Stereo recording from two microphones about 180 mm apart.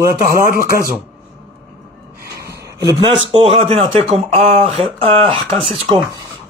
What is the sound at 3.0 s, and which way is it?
Speech, 30° right (ahead or behind).